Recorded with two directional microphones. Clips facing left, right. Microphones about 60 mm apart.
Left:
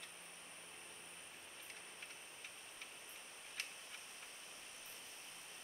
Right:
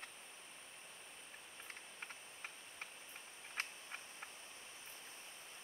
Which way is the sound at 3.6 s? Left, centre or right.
Right.